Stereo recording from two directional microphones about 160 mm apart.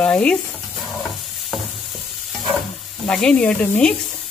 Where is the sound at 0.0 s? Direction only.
5° left (ahead or behind).